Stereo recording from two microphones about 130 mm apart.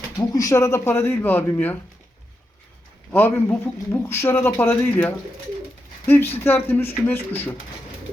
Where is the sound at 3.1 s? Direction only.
15° left (ahead or behind).